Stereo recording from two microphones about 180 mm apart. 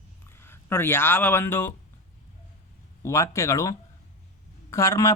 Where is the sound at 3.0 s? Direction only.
15° left (ahead or behind).